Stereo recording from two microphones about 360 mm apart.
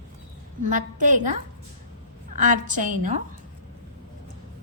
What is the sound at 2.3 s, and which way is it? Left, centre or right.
Speech, right.